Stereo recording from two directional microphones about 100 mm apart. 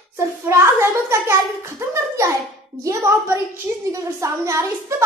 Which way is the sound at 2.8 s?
30° right (ahead or behind).